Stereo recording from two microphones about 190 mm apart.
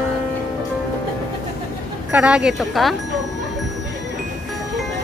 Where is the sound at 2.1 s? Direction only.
5° right (ahead or behind).